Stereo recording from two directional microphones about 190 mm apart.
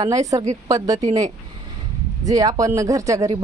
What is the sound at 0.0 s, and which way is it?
Speech, 15° right (ahead or behind).